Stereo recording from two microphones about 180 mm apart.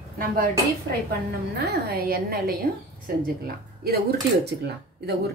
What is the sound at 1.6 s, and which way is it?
A woman's voice, 60° right (ahead or behind).